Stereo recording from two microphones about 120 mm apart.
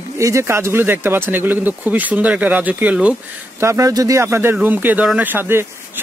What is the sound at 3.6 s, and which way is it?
Speech, 25° right (ahead or behind).